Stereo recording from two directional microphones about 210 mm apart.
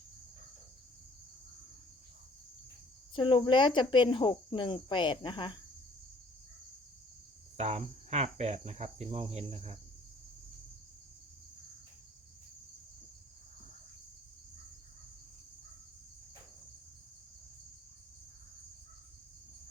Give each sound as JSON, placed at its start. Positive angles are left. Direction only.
{"t": 3.2, "sound": "speech", "side_deg": 25}
{"t": 7.5, "sound": "cricket", "side_deg": -30}